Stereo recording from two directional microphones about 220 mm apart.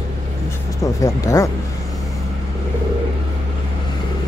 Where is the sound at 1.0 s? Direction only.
15° left (ahead or behind).